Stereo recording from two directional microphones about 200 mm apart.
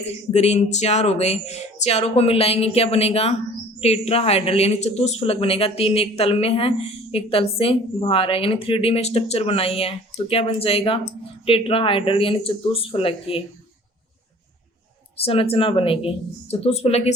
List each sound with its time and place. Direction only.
0.0 s speech: 30° left (ahead or behind)
15.2 s speech: 30° left (ahead or behind)